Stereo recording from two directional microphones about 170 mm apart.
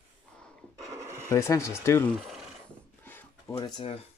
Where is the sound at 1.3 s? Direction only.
15° left (ahead or behind).